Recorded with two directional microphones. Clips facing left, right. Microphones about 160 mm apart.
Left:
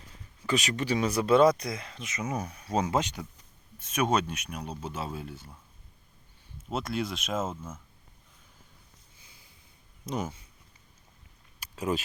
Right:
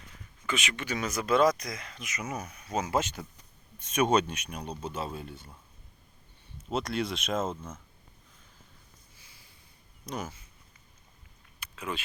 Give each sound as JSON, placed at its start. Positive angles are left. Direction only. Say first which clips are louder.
{"t": 0.1, "sound": "speech", "louder": "left 5 dB", "side_deg": 35}
{"t": 2.9, "sound": "speech", "louder": "left 1 dB", "side_deg": 15}
{"t": 3.8, "sound": "speech", "louder": "right 2 dB", "side_deg": 5}
{"t": 6.7, "sound": "speech", "louder": "right 1 dB", "side_deg": 0}
{"t": 10.1, "sound": "speech", "louder": "left 4 dB", "side_deg": 25}
{"t": 11.6, "sound": "a sound", "louder": "left 7 dB", "side_deg": 40}